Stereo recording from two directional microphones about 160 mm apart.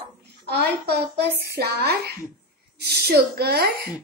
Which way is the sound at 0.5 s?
90° right.